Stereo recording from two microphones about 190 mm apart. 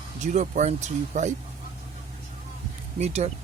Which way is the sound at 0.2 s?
40° right (ahead or behind).